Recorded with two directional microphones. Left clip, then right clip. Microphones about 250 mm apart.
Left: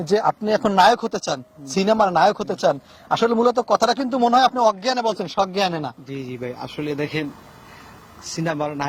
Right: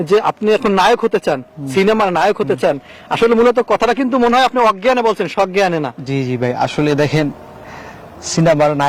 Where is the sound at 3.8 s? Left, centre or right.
Centre.